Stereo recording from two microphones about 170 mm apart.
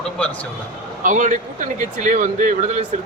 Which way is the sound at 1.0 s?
50° right (ahead or behind).